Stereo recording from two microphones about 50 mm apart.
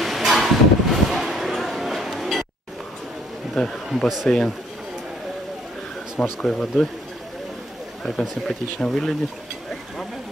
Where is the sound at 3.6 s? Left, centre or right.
Centre.